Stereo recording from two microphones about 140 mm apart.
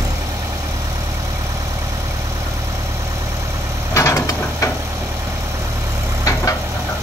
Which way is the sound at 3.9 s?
20° left (ahead or behind).